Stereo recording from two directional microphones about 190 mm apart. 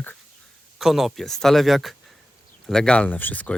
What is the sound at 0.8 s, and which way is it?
Speech, centre (ahead or behind).